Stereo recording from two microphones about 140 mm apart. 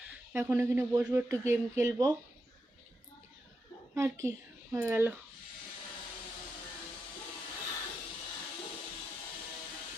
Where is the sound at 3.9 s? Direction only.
20° right (ahead or behind).